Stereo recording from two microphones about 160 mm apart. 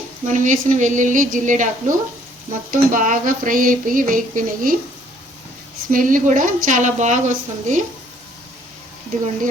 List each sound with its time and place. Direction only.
0.3 s a woman's voice: 50° right (ahead or behind)
2.5 s a sound: 55° right (ahead or behind)
5.9 s a woman's voice: 55° right (ahead or behind)